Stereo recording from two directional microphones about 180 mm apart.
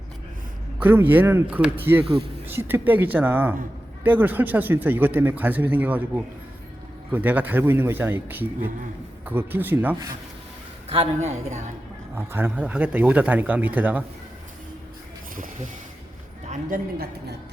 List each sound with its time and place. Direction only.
0.8 s speech: 10° right (ahead or behind)
10.8 s a woman's voice: 35° right (ahead or behind)
12.1 s speech: 10° right (ahead or behind)
16.5 s a woman's voice: 45° right (ahead or behind)